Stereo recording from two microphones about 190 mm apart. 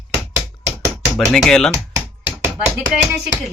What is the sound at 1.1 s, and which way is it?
Speech, 5° left (ahead or behind).